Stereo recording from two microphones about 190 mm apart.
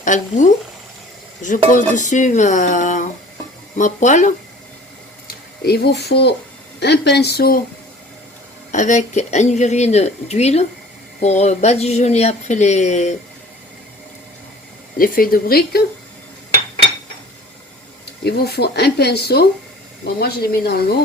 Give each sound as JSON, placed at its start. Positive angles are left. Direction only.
{"t": 0.0, "sound": "speech", "side_deg": 40}
{"t": 5.6, "sound": "speech", "side_deg": 60}
{"t": 8.7, "sound": "speech", "side_deg": 40}
{"t": 14.9, "sound": "a woman's voice", "side_deg": 50}
{"t": 18.2, "sound": "speech", "side_deg": 60}